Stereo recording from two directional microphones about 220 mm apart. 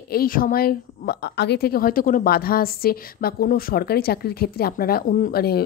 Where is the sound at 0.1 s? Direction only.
40° left (ahead or behind).